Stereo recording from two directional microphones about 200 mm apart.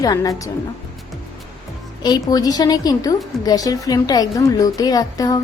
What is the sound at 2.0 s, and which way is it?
A woman's voice, 20° left (ahead or behind).